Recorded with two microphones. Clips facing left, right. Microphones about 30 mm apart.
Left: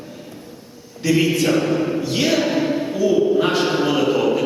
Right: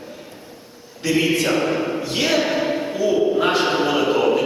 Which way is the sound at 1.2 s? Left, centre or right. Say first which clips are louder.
Right 1 dB; centre.